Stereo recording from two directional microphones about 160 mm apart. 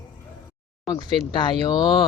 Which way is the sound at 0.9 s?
30° left (ahead or behind).